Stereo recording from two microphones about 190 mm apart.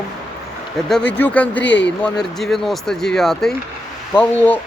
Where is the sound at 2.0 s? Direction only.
Centre (ahead or behind).